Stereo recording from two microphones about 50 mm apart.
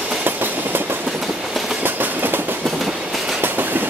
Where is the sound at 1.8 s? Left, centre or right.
Right.